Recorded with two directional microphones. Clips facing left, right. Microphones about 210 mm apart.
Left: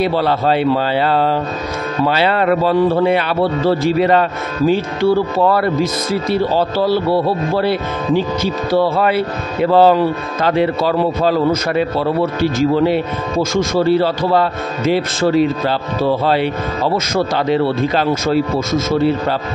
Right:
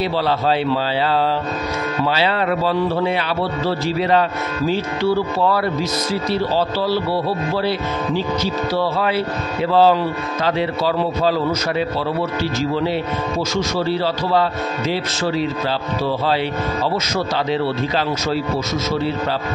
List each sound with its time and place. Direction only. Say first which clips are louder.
0.0 s speech: left 4 dB; 55° left (ahead or behind)
8.7 s speech: left 7 dB; 50° left (ahead or behind)